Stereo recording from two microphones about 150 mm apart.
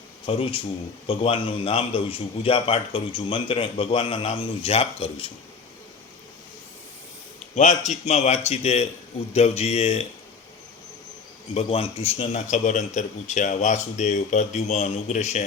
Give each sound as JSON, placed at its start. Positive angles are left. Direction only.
{"t": 0.3, "sound": "a man's voice", "side_deg": 40}
{"t": 7.5, "sound": "a man's voice", "side_deg": 55}
{"t": 11.5, "sound": "a man's voice", "side_deg": 40}